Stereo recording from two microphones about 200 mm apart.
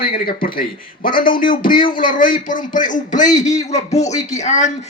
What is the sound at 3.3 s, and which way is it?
Speech, 15° left (ahead or behind).